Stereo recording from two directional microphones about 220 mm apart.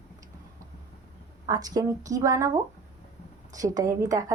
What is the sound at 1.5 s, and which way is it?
A woman's voice, 15° right (ahead or behind).